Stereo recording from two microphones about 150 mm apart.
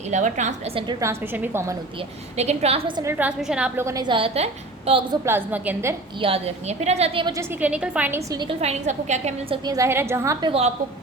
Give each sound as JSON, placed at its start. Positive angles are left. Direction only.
{"t": 0.1, "sound": "a woman's voice", "side_deg": -55}
{"t": 0.9, "sound": "a woman's voice", "side_deg": -15}
{"t": 2.3, "sound": "a woman's voice", "side_deg": -45}
{"t": 3.0, "sound": "a woman's voice", "side_deg": -15}
{"t": 3.8, "sound": "a woman's voice", "side_deg": -25}
{"t": 5.2, "sound": "a woman's voice", "side_deg": -15}
{"t": 6.1, "sound": "a woman's voice", "side_deg": -40}
{"t": 7.6, "sound": "a woman's voice", "side_deg": -10}
{"t": 8.3, "sound": "a woman's voice", "side_deg": -30}
{"t": 8.6, "sound": "a woman's voice", "side_deg": -50}
{"t": 9.6, "sound": "a woman's voice", "side_deg": -20}
{"t": 10.4, "sound": "a woman's voice", "side_deg": -40}